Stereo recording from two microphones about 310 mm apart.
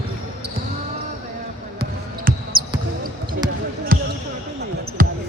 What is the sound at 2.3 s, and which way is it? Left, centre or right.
Basketball bounce, right.